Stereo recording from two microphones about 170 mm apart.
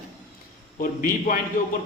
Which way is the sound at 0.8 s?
55° left (ahead or behind).